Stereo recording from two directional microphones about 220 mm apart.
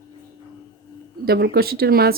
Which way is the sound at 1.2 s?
45° right (ahead or behind).